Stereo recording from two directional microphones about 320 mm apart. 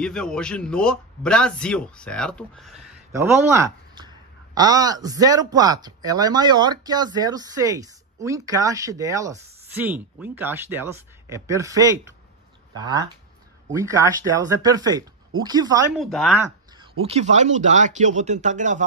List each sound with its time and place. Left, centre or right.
0.0 s a man's voice: centre
16.0 s a man's voice: centre
17.0 s speech: right